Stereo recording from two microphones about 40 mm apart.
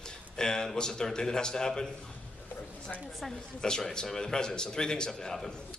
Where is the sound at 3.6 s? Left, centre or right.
Centre.